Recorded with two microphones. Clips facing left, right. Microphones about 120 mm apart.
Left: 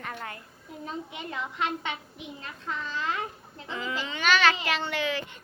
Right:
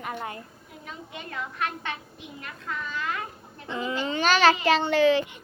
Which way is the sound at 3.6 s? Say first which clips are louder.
Right 4 dB; 30° right (ahead or behind).